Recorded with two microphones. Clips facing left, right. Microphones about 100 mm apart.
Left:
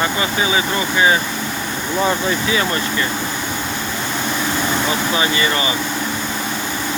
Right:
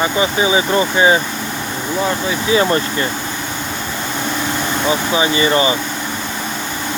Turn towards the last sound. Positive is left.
turn(degrees=-25)  # may be behind; listen again after turning